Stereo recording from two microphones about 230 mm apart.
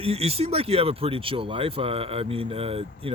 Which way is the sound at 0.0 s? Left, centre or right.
Right.